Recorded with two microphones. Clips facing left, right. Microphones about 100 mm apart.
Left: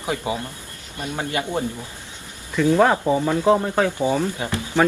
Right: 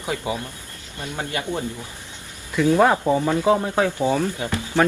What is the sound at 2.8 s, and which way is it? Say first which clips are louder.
Speech: even; centre (ahead or behind).